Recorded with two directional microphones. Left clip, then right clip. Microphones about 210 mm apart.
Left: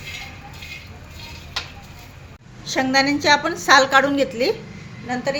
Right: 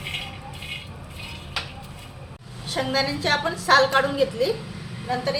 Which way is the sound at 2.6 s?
45° left (ahead or behind).